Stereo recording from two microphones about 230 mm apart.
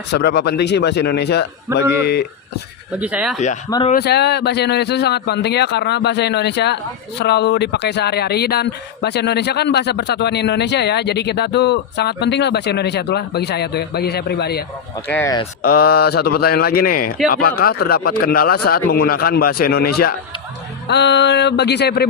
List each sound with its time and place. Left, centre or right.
0.1 s speech: left
3.0 s speech: centre
3.7 s speech: left
3.9 s speech: left
15.0 s speech: centre
15.6 s speech: left